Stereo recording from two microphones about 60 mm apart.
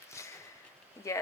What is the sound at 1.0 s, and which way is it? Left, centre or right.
Speech, left.